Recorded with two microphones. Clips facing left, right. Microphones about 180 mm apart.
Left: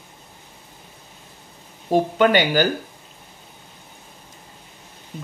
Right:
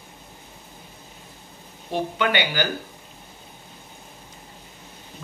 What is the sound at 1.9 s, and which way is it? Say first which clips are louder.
Speech: left 7 dB; 40° left (ahead or behind).